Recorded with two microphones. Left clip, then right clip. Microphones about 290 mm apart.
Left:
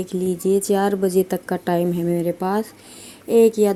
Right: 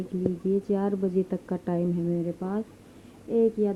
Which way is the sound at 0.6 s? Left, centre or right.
Centre.